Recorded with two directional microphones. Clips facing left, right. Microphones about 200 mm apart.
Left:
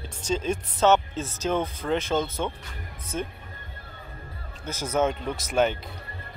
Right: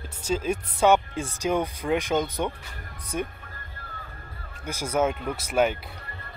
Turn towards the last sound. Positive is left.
turn(degrees=-10)  # may be behind; listen again after turning